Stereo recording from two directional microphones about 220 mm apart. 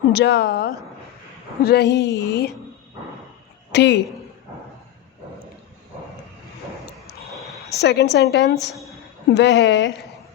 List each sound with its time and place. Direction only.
0.1 s speech: 50° left (ahead or behind)
3.7 s a woman's voice: 50° left (ahead or behind)
7.7 s speech: 50° left (ahead or behind)
9.9 s a sound: centre (ahead or behind)